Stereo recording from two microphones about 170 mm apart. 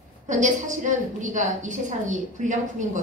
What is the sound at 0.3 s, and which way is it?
A woman's voice, 45° right (ahead or behind).